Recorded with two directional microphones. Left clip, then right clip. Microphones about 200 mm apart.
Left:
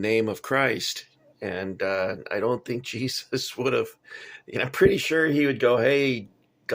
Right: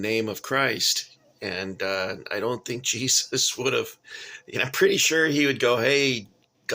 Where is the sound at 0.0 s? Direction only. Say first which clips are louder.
Left 2 dB; 15° left (ahead or behind).